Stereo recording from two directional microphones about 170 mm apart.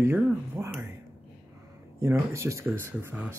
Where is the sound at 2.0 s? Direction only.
15° right (ahead or behind).